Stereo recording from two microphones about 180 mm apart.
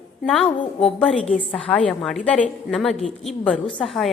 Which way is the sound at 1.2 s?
35° left (ahead or behind).